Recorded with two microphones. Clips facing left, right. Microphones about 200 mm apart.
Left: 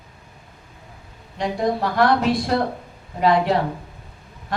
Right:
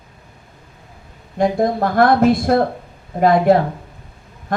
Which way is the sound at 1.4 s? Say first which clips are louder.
Right 5 dB; 50° right (ahead or behind).